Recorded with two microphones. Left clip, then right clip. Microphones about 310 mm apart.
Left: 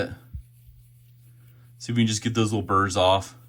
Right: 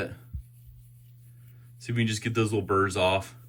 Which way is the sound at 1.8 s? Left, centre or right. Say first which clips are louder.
Left 4 dB; centre.